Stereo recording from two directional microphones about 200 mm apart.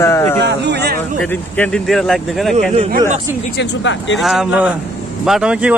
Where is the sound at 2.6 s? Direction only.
40° right (ahead or behind).